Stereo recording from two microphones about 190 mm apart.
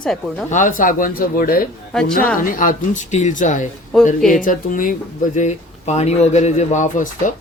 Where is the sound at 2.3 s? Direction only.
45° left (ahead or behind).